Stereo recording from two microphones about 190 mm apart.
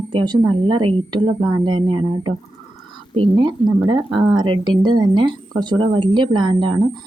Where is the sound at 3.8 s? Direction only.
25° right (ahead or behind).